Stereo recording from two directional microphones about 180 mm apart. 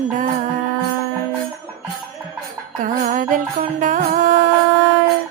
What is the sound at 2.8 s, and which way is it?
Music, 45° right (ahead or behind).